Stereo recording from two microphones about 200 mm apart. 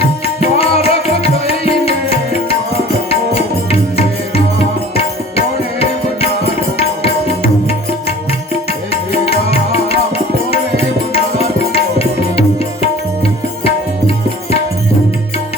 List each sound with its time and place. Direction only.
0.6 s music: 30° left (ahead or behind)
6.4 s tabla: 30° left (ahead or behind)
8.9 s music: 30° left (ahead or behind)
10.5 s tabla: 30° left (ahead or behind)